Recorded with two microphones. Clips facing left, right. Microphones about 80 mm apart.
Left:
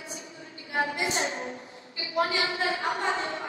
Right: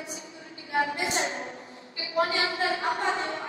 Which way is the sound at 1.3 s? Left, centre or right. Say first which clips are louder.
Left 1 dB; left.